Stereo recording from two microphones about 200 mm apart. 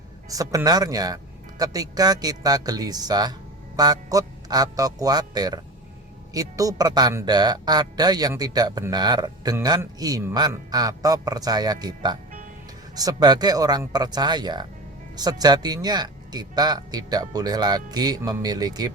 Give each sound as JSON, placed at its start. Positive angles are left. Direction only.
{"t": 0.3, "sound": "speech", "side_deg": -15}